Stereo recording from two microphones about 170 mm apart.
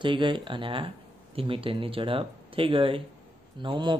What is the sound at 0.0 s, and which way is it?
Speech, 30° right (ahead or behind).